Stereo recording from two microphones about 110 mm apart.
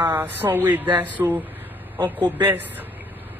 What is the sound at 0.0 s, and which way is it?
A woman's voice, 20° right (ahead or behind).